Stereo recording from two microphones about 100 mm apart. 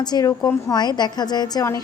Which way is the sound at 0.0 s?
40° left (ahead or behind).